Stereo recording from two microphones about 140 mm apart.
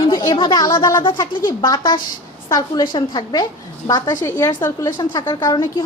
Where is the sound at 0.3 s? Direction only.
35° left (ahead or behind).